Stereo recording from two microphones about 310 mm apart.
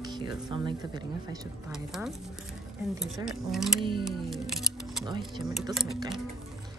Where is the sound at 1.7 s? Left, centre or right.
Centre.